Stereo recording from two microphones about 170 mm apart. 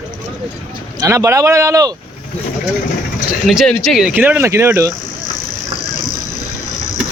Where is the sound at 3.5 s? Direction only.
Centre (ahead or behind); by 4.9 s 15° right (ahead or behind).